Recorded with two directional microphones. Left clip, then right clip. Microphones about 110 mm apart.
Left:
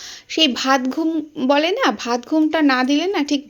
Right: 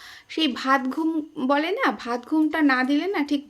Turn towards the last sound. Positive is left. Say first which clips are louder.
# left 5 dB
turn(degrees=25)  # may be behind; listen again after turning